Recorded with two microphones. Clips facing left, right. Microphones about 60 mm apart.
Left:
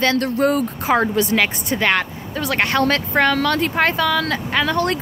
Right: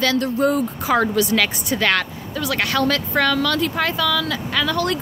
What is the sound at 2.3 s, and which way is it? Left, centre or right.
Speech, left.